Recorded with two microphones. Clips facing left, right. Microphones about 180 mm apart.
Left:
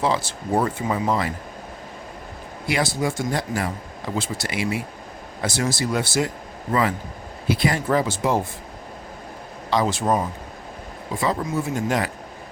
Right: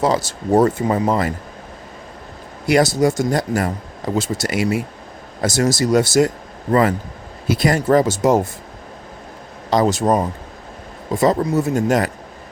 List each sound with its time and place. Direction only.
0.0 s speech: 40° right (ahead or behind)
2.6 s speech: 45° right (ahead or behind)
7.4 s speech: 45° right (ahead or behind)
9.6 s speech: 40° right (ahead or behind)